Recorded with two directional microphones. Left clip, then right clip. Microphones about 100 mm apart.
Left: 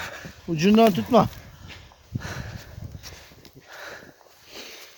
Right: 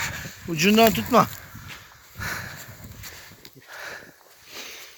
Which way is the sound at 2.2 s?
45° left (ahead or behind).